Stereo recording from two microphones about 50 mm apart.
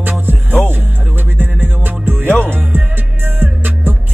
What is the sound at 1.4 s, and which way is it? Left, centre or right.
Music, right.